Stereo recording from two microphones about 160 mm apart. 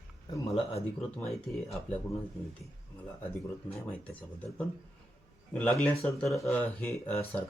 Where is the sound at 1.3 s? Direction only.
Centre (ahead or behind).